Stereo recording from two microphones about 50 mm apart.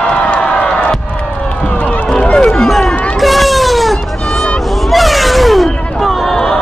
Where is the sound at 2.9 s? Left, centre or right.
Left.